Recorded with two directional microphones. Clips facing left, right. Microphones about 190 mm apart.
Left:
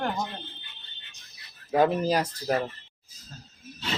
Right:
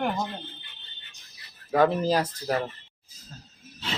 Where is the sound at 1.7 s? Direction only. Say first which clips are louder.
Right 1 dB; 15° left (ahead or behind).